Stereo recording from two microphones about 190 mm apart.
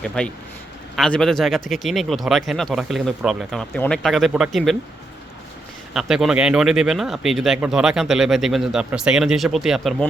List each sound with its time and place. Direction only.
0.2 s speech: 5° left (ahead or behind)
5.9 s speech: centre (ahead or behind)